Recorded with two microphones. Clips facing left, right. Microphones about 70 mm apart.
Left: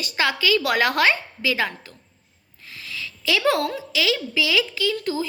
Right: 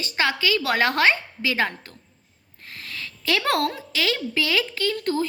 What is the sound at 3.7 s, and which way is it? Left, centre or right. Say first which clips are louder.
A woman's voice: left 2 dB; right.